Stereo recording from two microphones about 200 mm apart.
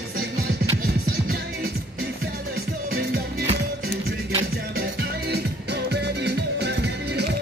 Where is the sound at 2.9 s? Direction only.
55° right (ahead or behind).